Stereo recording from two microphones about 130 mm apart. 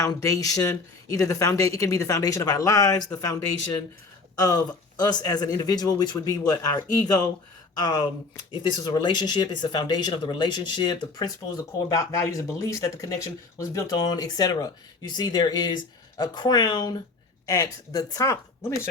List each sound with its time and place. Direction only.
0.0 s speech: 25° left (ahead or behind)